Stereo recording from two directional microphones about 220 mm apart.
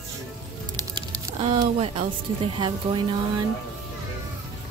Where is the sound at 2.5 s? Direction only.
20° right (ahead or behind).